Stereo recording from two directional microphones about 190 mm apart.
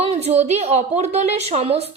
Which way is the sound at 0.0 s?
30° right (ahead or behind).